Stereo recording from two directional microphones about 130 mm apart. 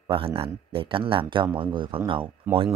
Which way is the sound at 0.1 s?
45° right (ahead or behind).